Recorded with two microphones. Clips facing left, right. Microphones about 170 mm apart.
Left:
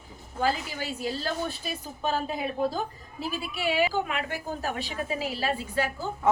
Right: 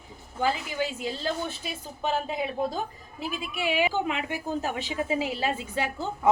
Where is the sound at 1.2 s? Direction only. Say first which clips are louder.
Even; 20° right (ahead or behind).